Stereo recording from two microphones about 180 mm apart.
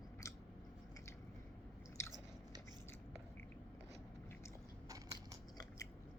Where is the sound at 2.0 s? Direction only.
15° left (ahead or behind).